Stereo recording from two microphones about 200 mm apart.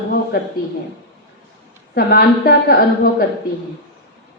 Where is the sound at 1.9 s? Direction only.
50° left (ahead or behind).